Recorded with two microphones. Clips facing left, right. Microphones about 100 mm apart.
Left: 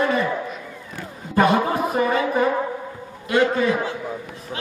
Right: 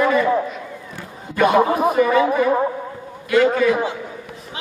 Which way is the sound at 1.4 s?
30° left (ahead or behind).